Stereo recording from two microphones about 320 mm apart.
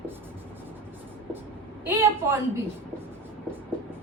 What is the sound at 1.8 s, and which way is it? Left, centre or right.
Speech, centre.